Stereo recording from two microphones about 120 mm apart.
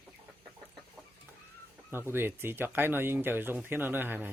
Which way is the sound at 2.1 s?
20° right (ahead or behind).